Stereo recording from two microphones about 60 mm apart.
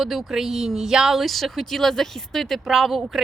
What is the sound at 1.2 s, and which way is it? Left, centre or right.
Speech, centre.